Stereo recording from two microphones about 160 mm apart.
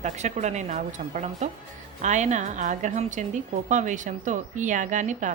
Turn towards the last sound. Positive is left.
turn(degrees=-50)  # may be behind; listen again after turning